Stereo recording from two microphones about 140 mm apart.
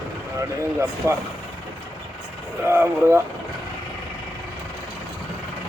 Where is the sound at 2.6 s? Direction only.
20° right (ahead or behind).